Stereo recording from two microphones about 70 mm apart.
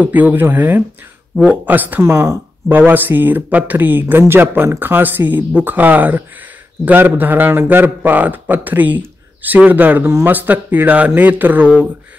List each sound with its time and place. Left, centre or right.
0.0 s a man's voice: right
2.0 s speech: right
2.7 s a man's voice: right
10.0 s speech: right
10.3 s a man's voice: right